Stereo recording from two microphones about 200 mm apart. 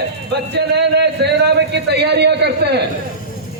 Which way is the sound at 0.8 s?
55° right (ahead or behind).